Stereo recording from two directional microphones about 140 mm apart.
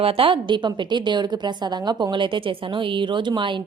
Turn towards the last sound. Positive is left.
turn(degrees=-35)  # may be behind; listen again after turning